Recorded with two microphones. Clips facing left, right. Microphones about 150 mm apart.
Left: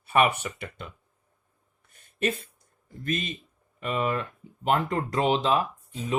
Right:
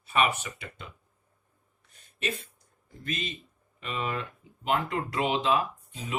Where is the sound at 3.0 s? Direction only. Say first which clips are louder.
Left 5 dB; 50° left (ahead or behind).